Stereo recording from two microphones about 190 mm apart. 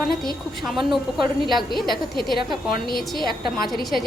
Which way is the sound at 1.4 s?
Centre (ahead or behind).